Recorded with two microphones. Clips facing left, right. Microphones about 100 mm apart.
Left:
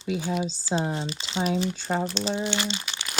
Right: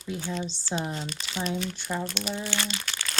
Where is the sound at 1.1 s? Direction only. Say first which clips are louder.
Left 5 dB; 25° left (ahead or behind).